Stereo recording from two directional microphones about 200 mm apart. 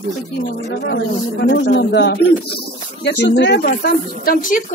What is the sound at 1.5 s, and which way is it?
A woman's voice, 65° left (ahead or behind).